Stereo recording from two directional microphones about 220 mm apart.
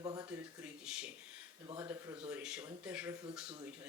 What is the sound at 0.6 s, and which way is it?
A man's voice, 5° right (ahead or behind).